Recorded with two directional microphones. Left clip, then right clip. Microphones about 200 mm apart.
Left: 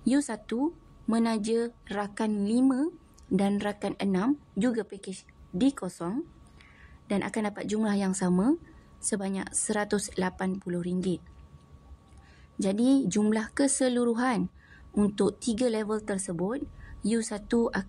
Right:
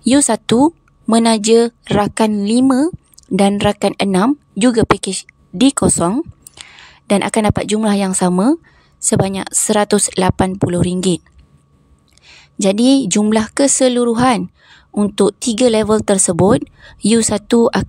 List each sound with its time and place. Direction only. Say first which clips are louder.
0.0 s a woman's voice: right 15 dB; 45° right (ahead or behind)
12.3 s a woman's voice: right 15 dB; 45° right (ahead or behind)